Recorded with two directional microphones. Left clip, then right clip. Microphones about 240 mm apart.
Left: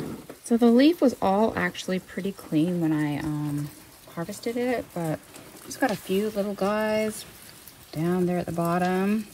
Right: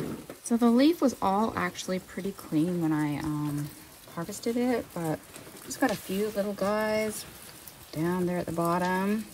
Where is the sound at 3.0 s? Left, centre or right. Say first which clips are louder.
Left 2 dB; right.